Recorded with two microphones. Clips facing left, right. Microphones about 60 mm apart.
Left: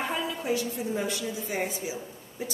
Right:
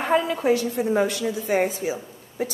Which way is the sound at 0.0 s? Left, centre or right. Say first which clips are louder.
Right 9 dB; right.